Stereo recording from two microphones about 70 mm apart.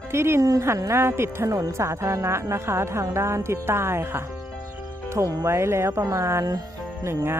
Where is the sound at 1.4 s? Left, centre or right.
Right.